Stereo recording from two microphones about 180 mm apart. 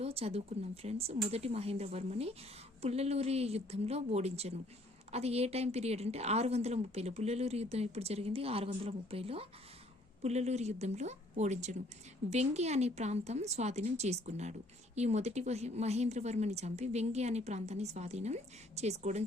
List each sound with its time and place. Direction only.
0.0 s a woman's voice: 35° right (ahead or behind)